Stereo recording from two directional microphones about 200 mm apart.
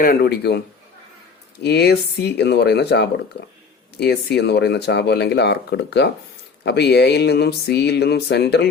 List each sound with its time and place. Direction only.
0.0 s speech: 50° left (ahead or behind)
1.6 s speech: 55° left (ahead or behind)